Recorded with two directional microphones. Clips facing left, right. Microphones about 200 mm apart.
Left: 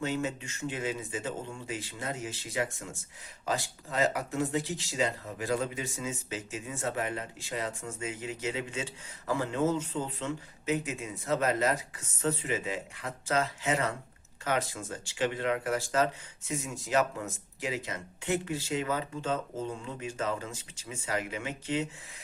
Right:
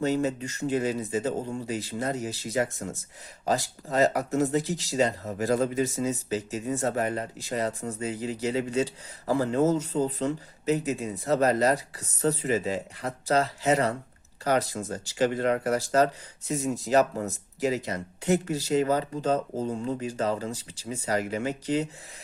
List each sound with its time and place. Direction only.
0.0 s speech: 40° right (ahead or behind)